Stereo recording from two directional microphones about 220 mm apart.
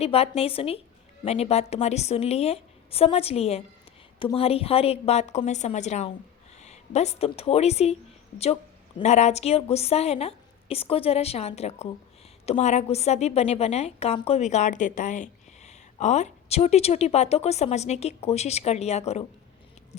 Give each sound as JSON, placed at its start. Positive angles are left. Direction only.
{"t": 0.0, "sound": "a woman's voice", "side_deg": 25}
{"t": 9.0, "sound": "a woman's voice", "side_deg": 30}